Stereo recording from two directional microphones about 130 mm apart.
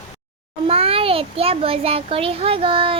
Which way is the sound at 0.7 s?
45° right (ahead or behind).